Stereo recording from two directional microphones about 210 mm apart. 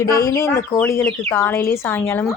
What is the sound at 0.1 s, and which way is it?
Speech, 15° left (ahead or behind).